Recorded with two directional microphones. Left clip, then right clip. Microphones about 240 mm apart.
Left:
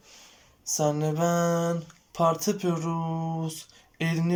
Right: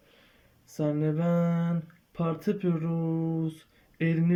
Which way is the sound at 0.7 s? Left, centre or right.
Left.